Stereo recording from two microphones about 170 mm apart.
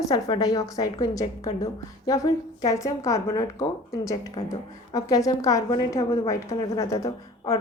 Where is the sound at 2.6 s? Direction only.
20° left (ahead or behind).